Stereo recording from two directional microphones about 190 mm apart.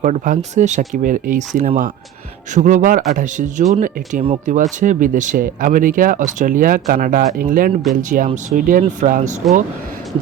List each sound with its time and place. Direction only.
0.0 s speech: 40° right (ahead or behind)